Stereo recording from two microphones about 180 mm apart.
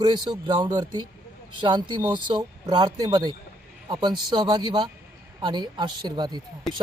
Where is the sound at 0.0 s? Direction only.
25° right (ahead or behind).